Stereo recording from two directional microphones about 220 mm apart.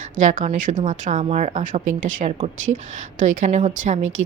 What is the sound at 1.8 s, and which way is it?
Speech, 60° right (ahead or behind).